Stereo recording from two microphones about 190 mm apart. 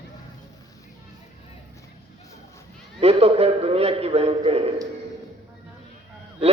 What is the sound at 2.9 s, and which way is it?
A man's voice, 30° right (ahead or behind).